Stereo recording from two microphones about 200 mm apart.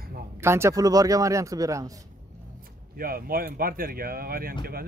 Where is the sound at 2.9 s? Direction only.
50° right (ahead or behind).